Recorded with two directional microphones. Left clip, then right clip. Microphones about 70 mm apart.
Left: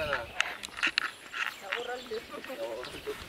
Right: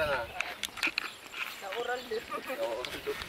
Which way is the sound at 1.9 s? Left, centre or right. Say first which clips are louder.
Right 3 dB; centre.